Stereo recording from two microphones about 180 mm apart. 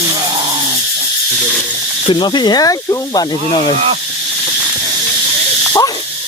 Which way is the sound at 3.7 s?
35° right (ahead or behind).